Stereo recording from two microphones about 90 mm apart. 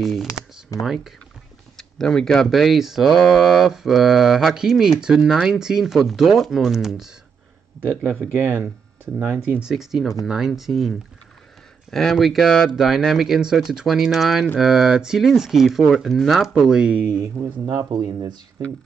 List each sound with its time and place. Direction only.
0.0 s speech: centre (ahead or behind)
0.3 s computer keyboard: 40° left (ahead or behind)
0.8 s speech: 5° right (ahead or behind)
8.4 s speech: 15° right (ahead or behind)
9.7 s speech: 5° right (ahead or behind)
17.6 s speech: 40° right (ahead or behind)